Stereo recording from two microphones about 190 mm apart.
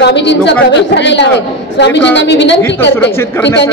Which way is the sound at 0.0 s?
65° left (ahead or behind).